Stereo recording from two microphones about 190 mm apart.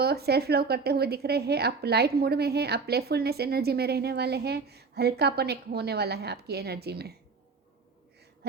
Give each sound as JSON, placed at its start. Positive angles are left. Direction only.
{"t": 0.0, "sound": "speech", "side_deg": -55}